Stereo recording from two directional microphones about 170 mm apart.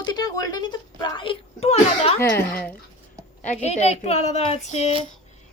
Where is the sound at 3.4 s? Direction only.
40° left (ahead or behind).